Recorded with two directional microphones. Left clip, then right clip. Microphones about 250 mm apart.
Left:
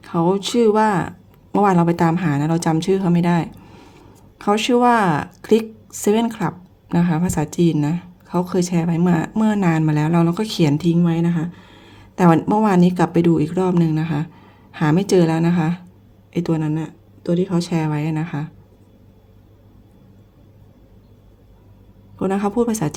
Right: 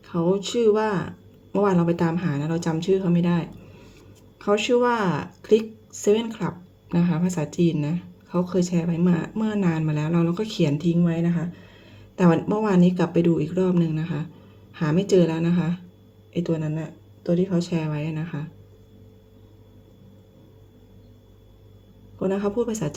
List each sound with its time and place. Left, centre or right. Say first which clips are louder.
0.0 s a woman's voice: left 5 dB; left
22.2 s a woman's voice: left 4 dB; left